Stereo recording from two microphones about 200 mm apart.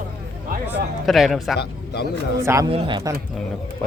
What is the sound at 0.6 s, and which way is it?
Speech, centre (ahead or behind).